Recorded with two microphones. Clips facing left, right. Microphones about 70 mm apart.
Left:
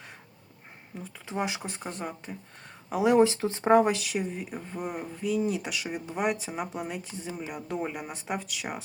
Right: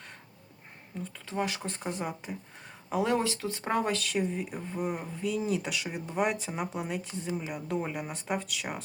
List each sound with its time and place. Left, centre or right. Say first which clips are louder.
0.9 s speech: right 2 dB; centre
1.3 s speech: left 1 dB; centre
1.6 s speech: right 1 dB; centre
2.9 s speech: left 4 dB; centre
3.2 s speech: left 9 dB; left; by 8.8 s centre